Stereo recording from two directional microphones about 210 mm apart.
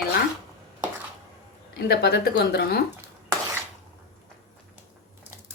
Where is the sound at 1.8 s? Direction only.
50° left (ahead or behind).